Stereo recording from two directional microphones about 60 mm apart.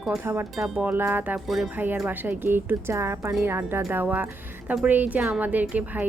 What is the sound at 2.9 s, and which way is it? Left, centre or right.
A woman's voice, right.